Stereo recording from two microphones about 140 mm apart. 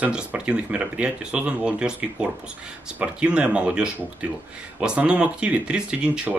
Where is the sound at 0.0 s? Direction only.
10° right (ahead or behind).